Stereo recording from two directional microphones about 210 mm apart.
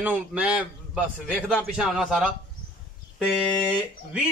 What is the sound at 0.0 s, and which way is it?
A man's voice, 5° right (ahead or behind).